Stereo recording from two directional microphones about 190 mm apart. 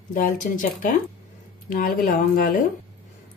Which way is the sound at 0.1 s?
45° left (ahead or behind).